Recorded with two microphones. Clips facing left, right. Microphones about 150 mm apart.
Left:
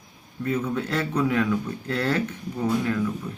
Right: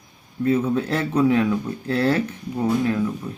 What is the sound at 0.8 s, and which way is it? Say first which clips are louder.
Speech: right 4 dB; 25° right (ahead or behind).